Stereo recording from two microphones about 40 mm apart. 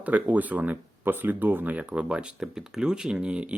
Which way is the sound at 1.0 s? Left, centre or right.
Right.